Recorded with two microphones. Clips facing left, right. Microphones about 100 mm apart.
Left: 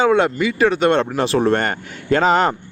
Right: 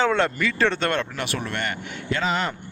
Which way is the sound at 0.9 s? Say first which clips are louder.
Left 10 dB; 30° left (ahead or behind).